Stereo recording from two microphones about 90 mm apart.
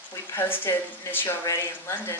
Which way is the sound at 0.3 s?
25° left (ahead or behind).